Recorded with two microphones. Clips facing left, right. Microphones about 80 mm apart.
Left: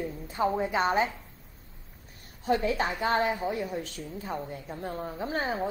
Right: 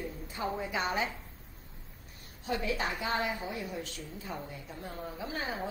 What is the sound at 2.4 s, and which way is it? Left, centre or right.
A woman's voice, left.